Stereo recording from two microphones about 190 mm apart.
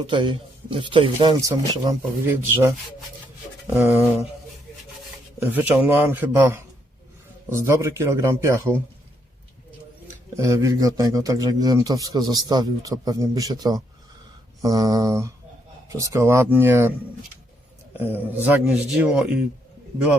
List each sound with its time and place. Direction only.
0.1 s a man's voice: 25° right (ahead or behind)
3.8 s a man's voice: 10° right (ahead or behind)
5.4 s a man's voice: 10° right (ahead or behind)
10.3 s a man's voice: 15° right (ahead or behind)
17.9 s a man's voice: 10° right (ahead or behind)